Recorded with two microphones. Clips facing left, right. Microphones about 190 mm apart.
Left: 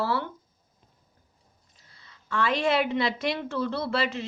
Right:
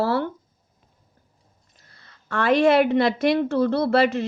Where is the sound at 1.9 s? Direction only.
55° right (ahead or behind).